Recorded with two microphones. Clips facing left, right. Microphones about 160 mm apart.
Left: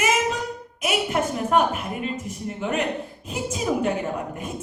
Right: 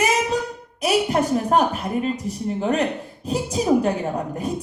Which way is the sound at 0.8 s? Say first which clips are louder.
Right 4 dB; 35° right (ahead or behind).